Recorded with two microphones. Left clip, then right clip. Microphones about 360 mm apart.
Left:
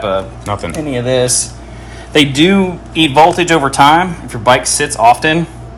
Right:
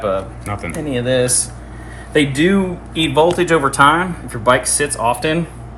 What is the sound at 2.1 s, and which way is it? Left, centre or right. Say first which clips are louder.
Speech: left 5 dB; left.